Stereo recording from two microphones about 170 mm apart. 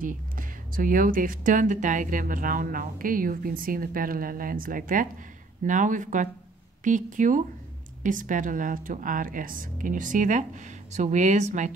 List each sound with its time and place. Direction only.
0.0 s speech: 55° right (ahead or behind)